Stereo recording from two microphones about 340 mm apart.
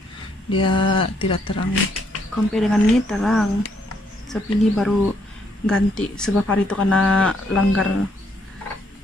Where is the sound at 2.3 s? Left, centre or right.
Centre.